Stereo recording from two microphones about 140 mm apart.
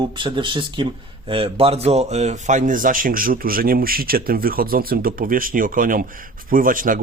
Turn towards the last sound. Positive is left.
turn(degrees=-80)